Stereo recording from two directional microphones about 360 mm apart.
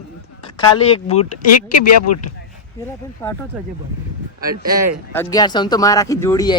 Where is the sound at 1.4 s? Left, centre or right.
Left.